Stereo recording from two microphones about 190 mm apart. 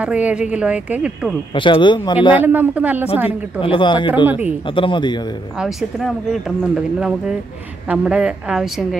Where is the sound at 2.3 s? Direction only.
10° right (ahead or behind).